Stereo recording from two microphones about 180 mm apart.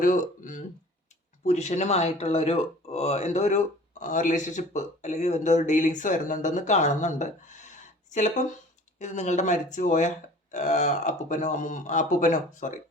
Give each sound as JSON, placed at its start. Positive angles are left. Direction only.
{"t": 0.0, "sound": "speech", "side_deg": 45}
{"t": 9.0, "sound": "speech", "side_deg": 40}